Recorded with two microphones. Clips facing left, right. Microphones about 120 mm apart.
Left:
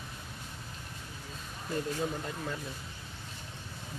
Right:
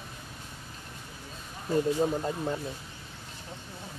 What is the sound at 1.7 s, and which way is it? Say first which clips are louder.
Speech: right 8 dB; 30° right (ahead or behind).